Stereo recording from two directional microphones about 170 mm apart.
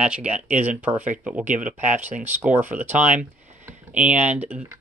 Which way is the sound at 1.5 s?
45° right (ahead or behind).